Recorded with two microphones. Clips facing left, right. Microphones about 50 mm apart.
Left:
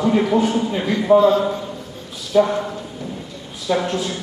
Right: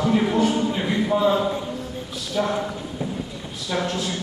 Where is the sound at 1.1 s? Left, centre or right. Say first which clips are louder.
Left 11 dB; centre.